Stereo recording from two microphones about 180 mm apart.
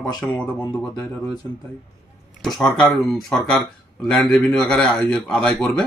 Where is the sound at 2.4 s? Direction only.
Centre (ahead or behind).